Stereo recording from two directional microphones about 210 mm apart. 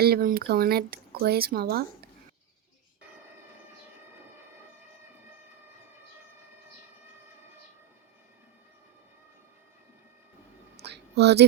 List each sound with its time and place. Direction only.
0.0 s speech: 45° right (ahead or behind)
10.8 s music: 50° right (ahead or behind)